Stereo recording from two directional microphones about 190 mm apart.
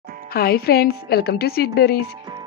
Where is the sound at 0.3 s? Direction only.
55° left (ahead or behind).